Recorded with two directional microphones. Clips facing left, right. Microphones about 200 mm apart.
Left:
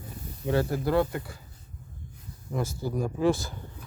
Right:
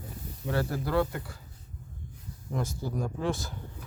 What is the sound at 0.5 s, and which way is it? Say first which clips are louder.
Speech: left 3 dB; 20° left (ahead or behind).